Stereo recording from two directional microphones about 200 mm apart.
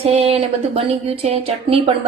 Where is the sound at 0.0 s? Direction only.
30° right (ahead or behind).